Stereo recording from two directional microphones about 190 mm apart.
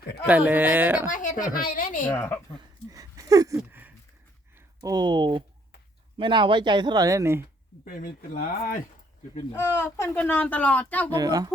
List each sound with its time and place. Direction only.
0.3 s speech: 10° right (ahead or behind)
1.1 s speech: 45° left (ahead or behind)
2.0 s speech: 10° left (ahead or behind)
2.6 s a sound: 20° right (ahead or behind)
4.5 s speech: 20° right (ahead or behind)
7.9 s speech: 50° left (ahead or behind)
9.5 s speech: 10° left (ahead or behind)
11.1 s speech: 20° right (ahead or behind)